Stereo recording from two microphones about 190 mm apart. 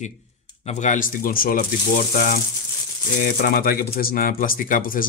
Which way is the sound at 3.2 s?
50° left (ahead or behind).